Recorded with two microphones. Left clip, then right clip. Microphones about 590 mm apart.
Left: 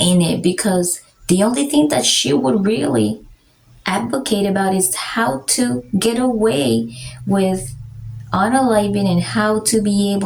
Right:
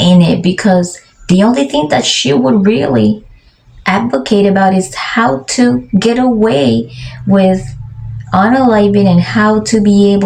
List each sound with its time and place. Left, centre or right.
0.0 s speech: left
8.3 s speech: left